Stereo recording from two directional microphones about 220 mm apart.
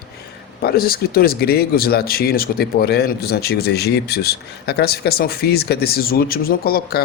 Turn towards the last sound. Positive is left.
turn(degrees=45)  # may be behind; listen again after turning